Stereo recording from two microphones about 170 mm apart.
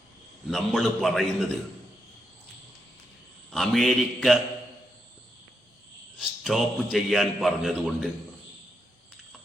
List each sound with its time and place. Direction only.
0.4 s a man's voice: centre (ahead or behind)
3.5 s a man's voice: centre (ahead or behind)
6.1 s a man's voice: centre (ahead or behind)